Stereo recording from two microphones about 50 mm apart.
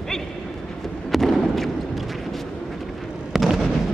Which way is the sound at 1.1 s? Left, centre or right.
Centre.